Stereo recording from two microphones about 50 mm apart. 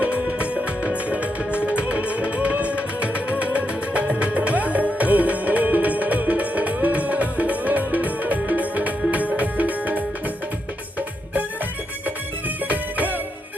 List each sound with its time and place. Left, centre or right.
0.0 s music: right
12.6 s music: right